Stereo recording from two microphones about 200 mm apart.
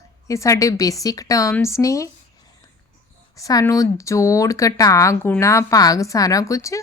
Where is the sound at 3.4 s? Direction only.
15° left (ahead or behind).